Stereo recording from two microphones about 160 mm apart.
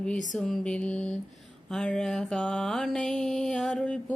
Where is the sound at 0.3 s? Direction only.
5° left (ahead or behind).